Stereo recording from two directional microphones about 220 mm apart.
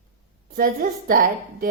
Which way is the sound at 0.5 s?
40° right (ahead or behind).